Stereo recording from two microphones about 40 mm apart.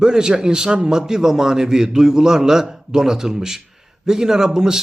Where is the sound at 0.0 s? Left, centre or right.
Centre.